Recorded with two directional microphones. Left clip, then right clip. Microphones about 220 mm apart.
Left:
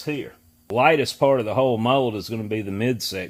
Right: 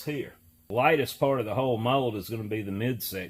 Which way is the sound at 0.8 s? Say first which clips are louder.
Left 6 dB; 50° left (ahead or behind).